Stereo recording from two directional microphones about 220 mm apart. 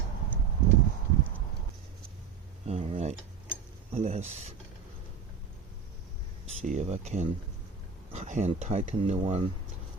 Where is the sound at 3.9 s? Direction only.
30° right (ahead or behind).